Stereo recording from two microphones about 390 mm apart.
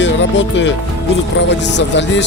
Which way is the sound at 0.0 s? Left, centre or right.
Left.